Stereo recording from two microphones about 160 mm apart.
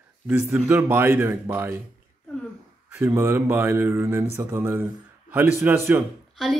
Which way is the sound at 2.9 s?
15° right (ahead or behind).